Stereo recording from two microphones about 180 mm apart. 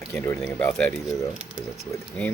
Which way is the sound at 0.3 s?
5° left (ahead or behind).